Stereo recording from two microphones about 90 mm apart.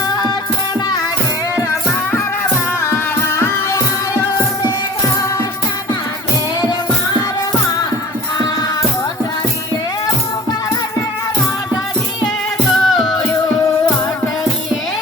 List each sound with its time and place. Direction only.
0.1 s music: 50° left (ahead or behind)
2.8 s music: 30° left (ahead or behind)
12.7 s music: centre (ahead or behind)